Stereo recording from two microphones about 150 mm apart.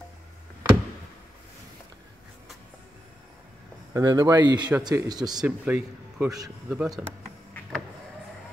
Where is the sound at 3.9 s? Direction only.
25° right (ahead or behind).